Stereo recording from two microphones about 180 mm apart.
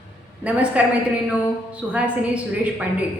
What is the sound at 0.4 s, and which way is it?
A woman's voice, 5° right (ahead or behind).